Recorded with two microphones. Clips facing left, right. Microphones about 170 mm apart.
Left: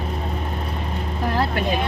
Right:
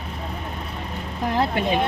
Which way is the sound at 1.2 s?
20° right (ahead or behind).